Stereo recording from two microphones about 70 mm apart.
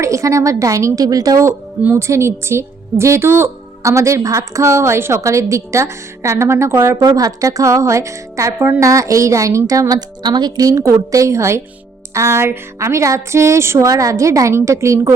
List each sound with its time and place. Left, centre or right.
0.0 s a woman's voice: right
2.0 s a woman's voice: right
7.0 s a woman's voice: right
10.2 s a woman's voice: right